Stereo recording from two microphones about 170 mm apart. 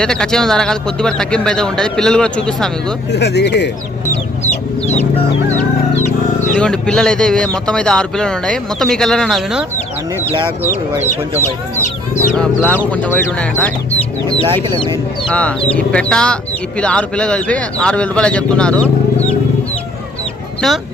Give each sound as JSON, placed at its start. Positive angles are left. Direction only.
{"t": 0.0, "sound": "speech", "side_deg": 5}
{"t": 3.1, "sound": "speech", "side_deg": 80}
{"t": 5.5, "sound": "chicken", "side_deg": 45}
{"t": 6.6, "sound": "speech", "side_deg": 5}
{"t": 10.6, "sound": "speech", "side_deg": -10}
{"t": 12.3, "sound": "speech", "side_deg": 5}
{"t": 14.4, "sound": "speech", "side_deg": -25}
{"t": 15.3, "sound": "speech", "side_deg": 5}
{"t": 20.6, "sound": "speech", "side_deg": 0}